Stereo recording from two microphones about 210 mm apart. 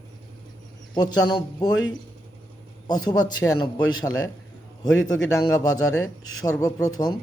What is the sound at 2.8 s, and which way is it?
A man's voice, 20° left (ahead or behind).